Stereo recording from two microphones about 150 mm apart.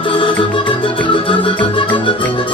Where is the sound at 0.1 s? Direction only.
35° left (ahead or behind).